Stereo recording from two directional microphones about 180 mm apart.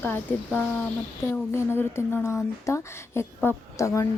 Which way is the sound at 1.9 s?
15° left (ahead or behind).